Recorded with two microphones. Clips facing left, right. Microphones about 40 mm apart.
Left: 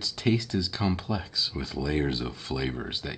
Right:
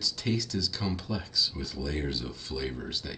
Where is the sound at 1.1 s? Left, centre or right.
Centre.